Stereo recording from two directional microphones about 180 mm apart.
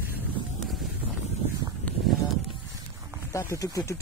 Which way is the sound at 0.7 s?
Centre (ahead or behind).